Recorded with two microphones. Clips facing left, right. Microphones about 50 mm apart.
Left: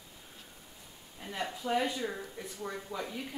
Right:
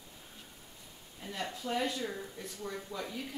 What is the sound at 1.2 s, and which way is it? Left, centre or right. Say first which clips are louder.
Speech: left 2 dB; centre.